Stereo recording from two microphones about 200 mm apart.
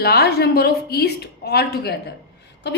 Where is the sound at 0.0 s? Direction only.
50° left (ahead or behind).